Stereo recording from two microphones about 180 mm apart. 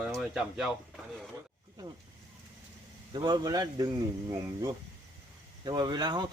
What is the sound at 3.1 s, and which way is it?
Speech, 25° right (ahead or behind).